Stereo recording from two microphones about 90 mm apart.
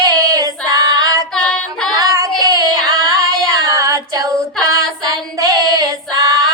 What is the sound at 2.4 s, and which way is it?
Female singing, 45° right (ahead or behind).